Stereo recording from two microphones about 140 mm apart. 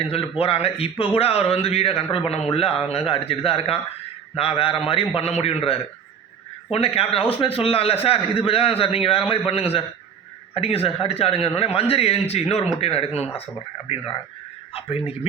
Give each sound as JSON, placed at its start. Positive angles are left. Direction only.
{"t": 0.0, "sound": "a man's voice", "side_deg": 45}